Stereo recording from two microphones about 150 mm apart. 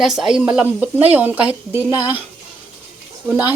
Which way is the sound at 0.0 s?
5° right (ahead or behind).